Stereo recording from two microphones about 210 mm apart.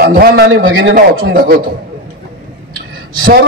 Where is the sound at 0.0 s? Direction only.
45° right (ahead or behind).